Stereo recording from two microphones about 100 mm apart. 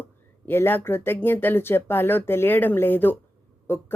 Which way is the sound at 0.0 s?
20° left (ahead or behind).